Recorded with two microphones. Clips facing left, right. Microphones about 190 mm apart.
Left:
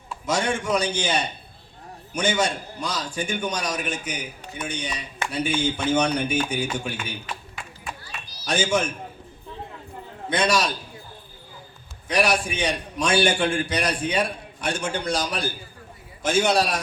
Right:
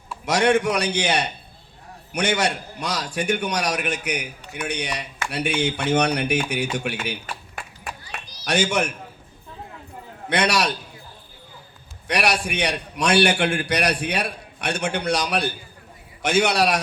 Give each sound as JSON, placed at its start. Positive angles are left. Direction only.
{"t": 0.3, "sound": "a man's voice", "side_deg": -65}
{"t": 7.0, "sound": "a sound", "side_deg": -70}
{"t": 8.4, "sound": "a man's voice", "side_deg": -65}
{"t": 10.2, "sound": "a man's voice", "side_deg": -70}
{"t": 12.0, "sound": "a man's voice", "side_deg": -70}